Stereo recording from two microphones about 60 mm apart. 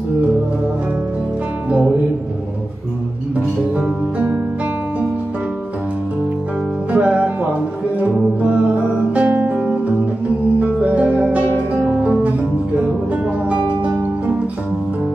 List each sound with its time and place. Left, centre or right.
6.9 s music: right
10.6 s music: right
12.0 s guitar: right
12.8 s music: right